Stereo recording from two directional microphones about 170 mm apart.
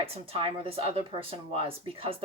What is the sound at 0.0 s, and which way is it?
A woman's voice, 30° right (ahead or behind).